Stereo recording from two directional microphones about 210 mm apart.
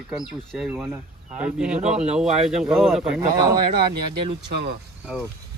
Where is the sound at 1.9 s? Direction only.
30° right (ahead or behind).